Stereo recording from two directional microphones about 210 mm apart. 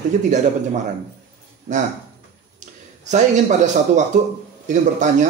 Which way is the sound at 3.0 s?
35° right (ahead or behind).